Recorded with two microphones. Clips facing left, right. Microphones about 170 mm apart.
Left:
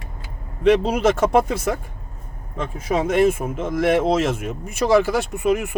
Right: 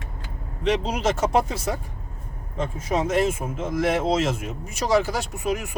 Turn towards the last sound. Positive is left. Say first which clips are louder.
# left 6 dB
turn(degrees=55)  # may be behind; listen again after turning